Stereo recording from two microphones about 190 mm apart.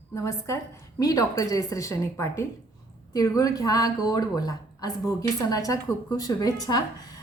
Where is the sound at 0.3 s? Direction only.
15° left (ahead or behind).